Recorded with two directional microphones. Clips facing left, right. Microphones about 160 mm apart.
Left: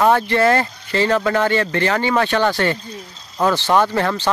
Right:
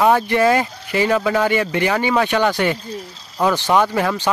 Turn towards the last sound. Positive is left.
turn(degrees=-10)  # may be behind; listen again after turning